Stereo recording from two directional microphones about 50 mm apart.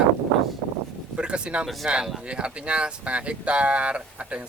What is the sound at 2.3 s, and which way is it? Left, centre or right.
Speech, right.